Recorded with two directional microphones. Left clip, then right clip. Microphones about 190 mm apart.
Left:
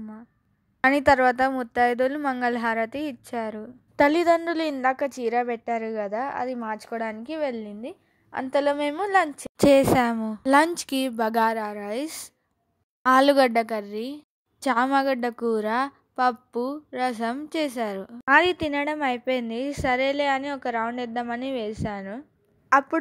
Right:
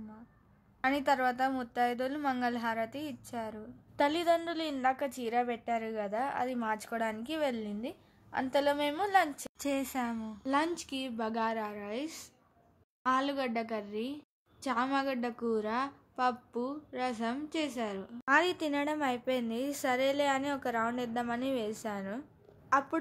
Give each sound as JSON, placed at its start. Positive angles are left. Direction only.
{"t": 0.7, "sound": "a woman's voice", "side_deg": 45}
{"t": 22.7, "sound": "a woman's voice", "side_deg": 40}